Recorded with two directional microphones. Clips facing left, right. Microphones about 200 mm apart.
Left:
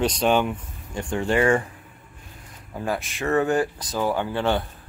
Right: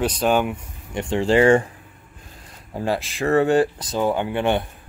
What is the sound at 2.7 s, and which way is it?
Speech, 30° right (ahead or behind).